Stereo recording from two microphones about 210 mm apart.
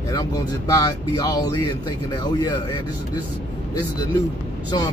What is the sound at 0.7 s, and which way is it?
A man's voice, 15° left (ahead or behind).